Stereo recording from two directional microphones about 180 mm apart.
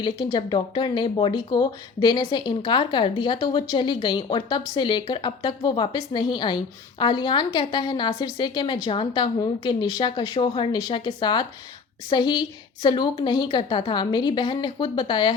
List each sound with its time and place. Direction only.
0.0 s speech: 25° left (ahead or behind)